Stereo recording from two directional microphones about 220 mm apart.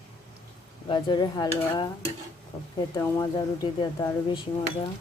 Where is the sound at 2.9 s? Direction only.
20° left (ahead or behind).